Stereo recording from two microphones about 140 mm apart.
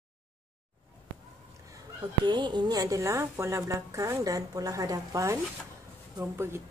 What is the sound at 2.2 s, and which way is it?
A woman's voice, 35° right (ahead or behind).